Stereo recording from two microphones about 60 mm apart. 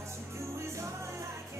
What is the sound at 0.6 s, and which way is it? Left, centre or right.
Music, right.